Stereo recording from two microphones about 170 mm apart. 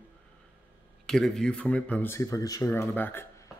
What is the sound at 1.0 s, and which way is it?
Speech, 5° left (ahead or behind).